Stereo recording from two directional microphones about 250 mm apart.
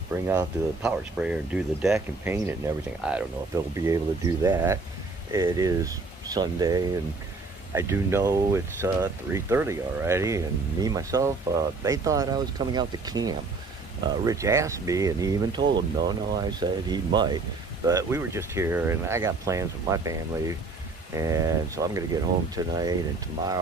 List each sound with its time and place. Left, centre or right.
0.1 s speech: centre